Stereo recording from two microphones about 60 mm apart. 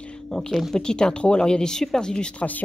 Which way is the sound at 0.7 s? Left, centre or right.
Centre.